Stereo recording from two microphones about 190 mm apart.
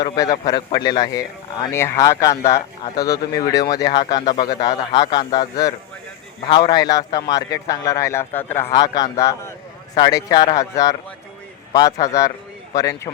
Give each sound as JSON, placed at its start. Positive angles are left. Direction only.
{"t": 0.0, "sound": "a man's voice", "side_deg": 20}